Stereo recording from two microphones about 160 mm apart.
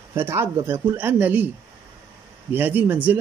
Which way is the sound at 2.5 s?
10° right (ahead or behind).